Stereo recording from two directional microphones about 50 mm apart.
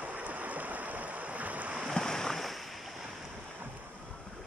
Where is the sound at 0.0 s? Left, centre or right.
Right.